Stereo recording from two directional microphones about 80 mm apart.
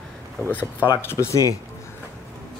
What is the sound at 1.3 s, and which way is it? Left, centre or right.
Speech, left.